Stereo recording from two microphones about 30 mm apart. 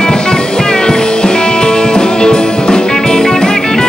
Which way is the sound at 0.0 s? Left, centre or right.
Left.